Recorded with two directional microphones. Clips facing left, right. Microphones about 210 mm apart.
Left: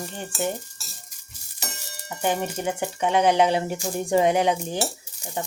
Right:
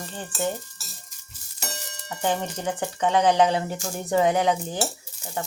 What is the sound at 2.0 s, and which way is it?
Speech, 15° left (ahead or behind).